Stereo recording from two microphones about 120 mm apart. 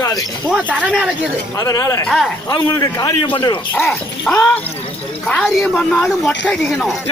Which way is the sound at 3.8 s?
Centre (ahead or behind).